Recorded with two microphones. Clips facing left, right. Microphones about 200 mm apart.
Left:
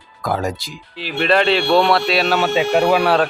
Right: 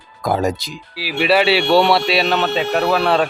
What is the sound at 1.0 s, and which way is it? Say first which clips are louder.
Speech: right 1 dB; 5° right (ahead or behind).